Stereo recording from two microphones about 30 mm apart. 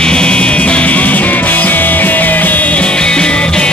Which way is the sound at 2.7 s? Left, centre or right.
Left.